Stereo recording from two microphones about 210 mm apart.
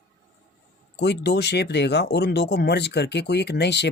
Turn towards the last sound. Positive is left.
turn(degrees=55)  # may be behind; listen again after turning